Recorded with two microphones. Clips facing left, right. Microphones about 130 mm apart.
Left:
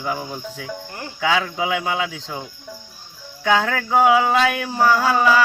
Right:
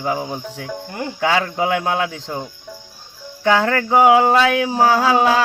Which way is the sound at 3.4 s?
55° right (ahead or behind).